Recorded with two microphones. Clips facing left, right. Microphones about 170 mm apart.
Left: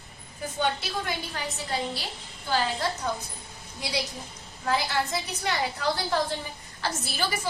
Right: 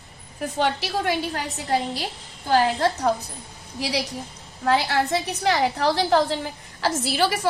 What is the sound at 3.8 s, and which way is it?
A woman's voice, 75° right (ahead or behind).